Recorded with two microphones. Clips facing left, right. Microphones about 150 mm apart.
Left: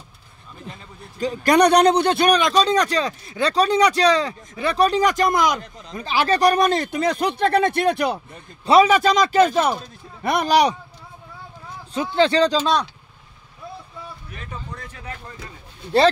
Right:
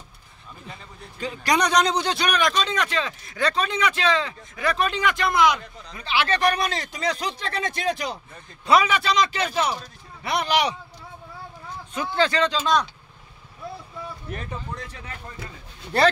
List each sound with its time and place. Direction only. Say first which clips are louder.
1.2 s speech: left 7 dB; 45° left (ahead or behind)
2.3 s speech: left 6 dB; 35° left (ahead or behind); by 8.2 s 60° left (ahead or behind)
8.6 s a man's voice: left 5 dB; 30° left (ahead or behind)
8.9 s speech: left 7 dB; 45° left (ahead or behind)
11.9 s a man's voice: left 5 dB; 25° left (ahead or behind)